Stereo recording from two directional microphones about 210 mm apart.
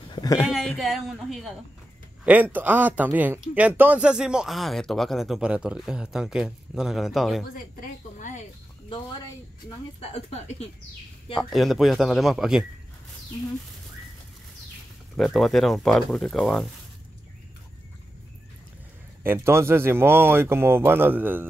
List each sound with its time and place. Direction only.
0.1 s a sound: 15° left (ahead or behind)
0.5 s speech: centre (ahead or behind)
8.2 s a sound: 35° left (ahead or behind)
9.9 s speech: 30° left (ahead or behind)
11.3 s speech: centre (ahead or behind)
15.1 s speech: centre (ahead or behind)
19.2 s speech: 10° right (ahead or behind)